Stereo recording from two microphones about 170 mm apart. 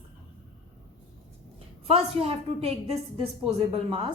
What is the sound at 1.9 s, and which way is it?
A woman's voice, 35° right (ahead or behind).